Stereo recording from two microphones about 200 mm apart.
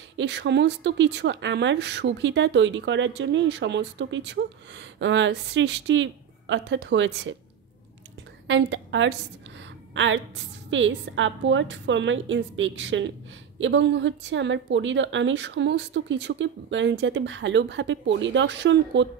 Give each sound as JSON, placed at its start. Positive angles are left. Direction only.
{"t": 0.2, "sound": "speech", "side_deg": -60}
{"t": 8.5, "sound": "a woman's voice", "side_deg": -65}